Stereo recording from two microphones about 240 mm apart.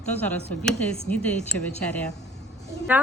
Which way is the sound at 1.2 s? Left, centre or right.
Centre.